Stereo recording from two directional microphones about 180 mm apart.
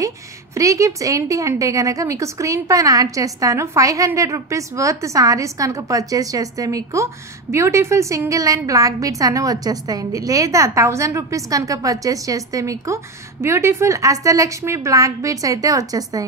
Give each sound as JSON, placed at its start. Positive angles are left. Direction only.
{"t": 0.6, "sound": "a woman's voice", "side_deg": -15}